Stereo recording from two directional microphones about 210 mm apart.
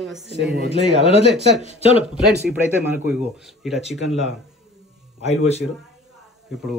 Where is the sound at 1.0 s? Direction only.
25° left (ahead or behind).